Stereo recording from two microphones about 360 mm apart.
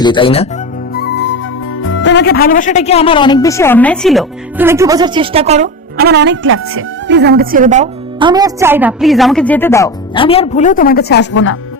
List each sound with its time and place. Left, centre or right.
0.0 s speech: centre
0.9 s music: left
1.8 s speech: left